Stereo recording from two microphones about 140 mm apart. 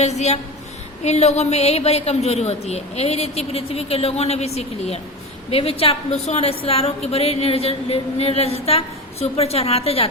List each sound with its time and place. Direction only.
0.0 s a woman's voice: 50° left (ahead or behind)